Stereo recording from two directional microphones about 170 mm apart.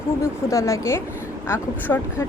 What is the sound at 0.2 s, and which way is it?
A woman's voice, 15° left (ahead or behind).